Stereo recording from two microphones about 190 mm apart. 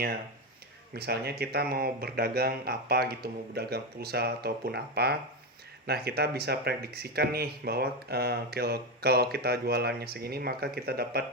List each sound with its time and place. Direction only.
0.9 s speech: 55° right (ahead or behind)